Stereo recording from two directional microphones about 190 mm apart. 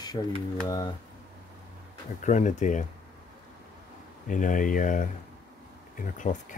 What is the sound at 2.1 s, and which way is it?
Speech, 40° left (ahead or behind).